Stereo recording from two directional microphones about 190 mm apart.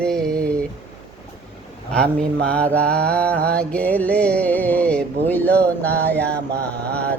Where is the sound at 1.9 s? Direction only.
5° left (ahead or behind).